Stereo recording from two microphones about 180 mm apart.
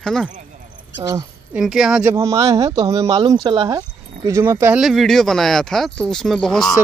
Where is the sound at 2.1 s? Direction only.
15° right (ahead or behind).